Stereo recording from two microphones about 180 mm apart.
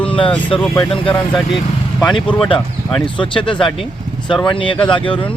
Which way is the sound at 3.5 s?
Centre (ahead or behind).